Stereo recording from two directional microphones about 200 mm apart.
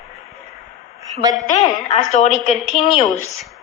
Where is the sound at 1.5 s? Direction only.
20° left (ahead or behind).